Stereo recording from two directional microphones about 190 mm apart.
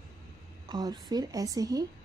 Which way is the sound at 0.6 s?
20° right (ahead or behind).